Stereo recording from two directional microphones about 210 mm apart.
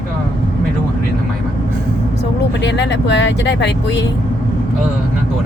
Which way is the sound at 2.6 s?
55° left (ahead or behind).